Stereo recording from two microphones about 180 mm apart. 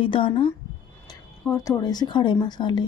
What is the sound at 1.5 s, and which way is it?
A woman's voice, 20° left (ahead or behind).